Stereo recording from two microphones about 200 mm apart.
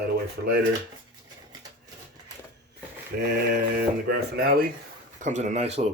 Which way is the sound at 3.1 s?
45° right (ahead or behind).